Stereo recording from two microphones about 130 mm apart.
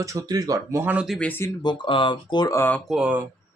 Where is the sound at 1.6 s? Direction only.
35° left (ahead or behind).